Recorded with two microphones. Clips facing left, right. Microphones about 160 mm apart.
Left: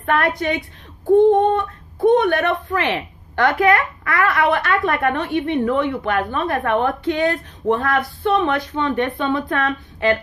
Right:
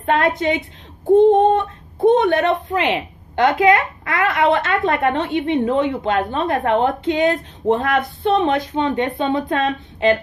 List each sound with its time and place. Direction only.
0.0 s speech: 20° right (ahead or behind)